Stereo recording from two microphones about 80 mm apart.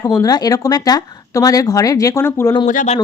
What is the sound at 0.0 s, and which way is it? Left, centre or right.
Speech, left.